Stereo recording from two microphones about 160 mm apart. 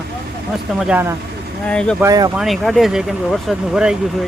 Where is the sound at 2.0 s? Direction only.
20° right (ahead or behind).